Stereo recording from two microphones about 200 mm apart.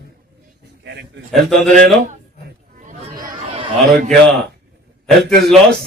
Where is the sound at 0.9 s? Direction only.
60° right (ahead or behind).